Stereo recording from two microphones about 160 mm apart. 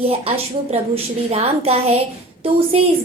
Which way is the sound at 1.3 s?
40° right (ahead or behind).